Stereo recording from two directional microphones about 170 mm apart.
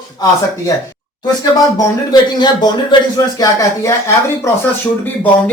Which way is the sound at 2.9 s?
20° left (ahead or behind).